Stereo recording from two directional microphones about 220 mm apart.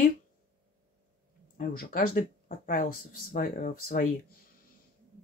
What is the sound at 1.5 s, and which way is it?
Speech, 40° left (ahead or behind).